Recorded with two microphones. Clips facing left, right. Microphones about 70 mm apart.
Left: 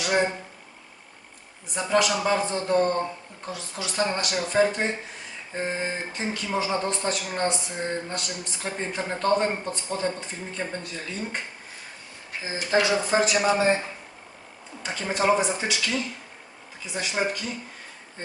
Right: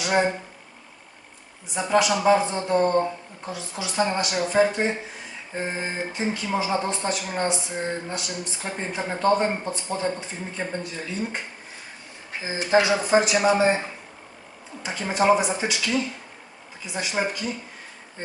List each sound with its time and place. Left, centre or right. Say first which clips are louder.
0.0 s speech: right 1 dB; centre
1.7 s speech: right 2 dB; centre
12.4 s speech: right 3 dB; right
14.8 s speech: right 3 dB; centre